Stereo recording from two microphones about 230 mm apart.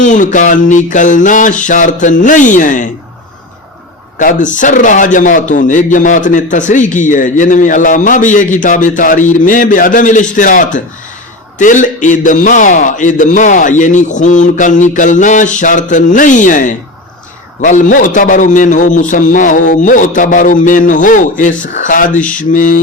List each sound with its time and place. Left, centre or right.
0.0 s a man's voice: left
4.2 s a man's voice: left